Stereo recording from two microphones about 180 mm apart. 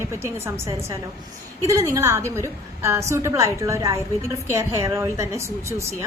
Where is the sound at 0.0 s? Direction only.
15° right (ahead or behind).